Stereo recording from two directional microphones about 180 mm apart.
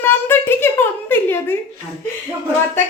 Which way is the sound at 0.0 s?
10° left (ahead or behind).